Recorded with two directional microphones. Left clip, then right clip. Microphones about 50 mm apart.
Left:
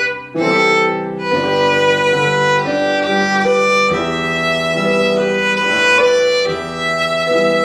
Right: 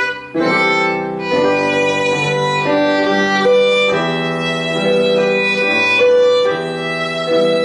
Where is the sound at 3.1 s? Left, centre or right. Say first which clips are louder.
Right 1 dB; centre.